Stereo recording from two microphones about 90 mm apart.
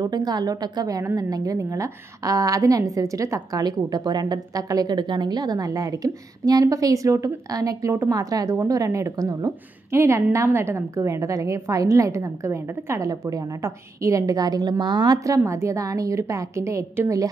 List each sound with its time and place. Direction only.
0.0 s a woman's voice: 50° right (ahead or behind)
15.1 s a woman's voice: 40° right (ahead or behind)